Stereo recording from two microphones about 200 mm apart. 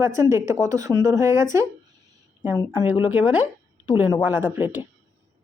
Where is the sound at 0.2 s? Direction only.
15° right (ahead or behind).